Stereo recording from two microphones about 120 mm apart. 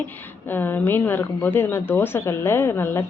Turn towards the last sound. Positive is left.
turn(degrees=20)  # may be behind; listen again after turning